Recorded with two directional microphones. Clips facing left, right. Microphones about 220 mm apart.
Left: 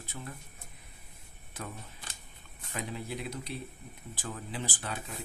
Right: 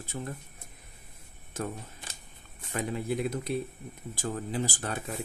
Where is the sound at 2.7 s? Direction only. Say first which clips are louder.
Right 7 dB; 50° right (ahead or behind).